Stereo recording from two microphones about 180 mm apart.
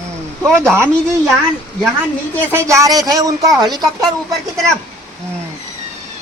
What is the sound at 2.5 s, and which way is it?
A woman's voice, 15° right (ahead or behind).